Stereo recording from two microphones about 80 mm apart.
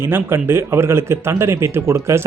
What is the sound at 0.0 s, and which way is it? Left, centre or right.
Speech, right.